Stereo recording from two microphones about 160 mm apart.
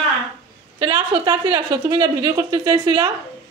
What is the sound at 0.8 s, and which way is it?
Speech, 30° right (ahead or behind).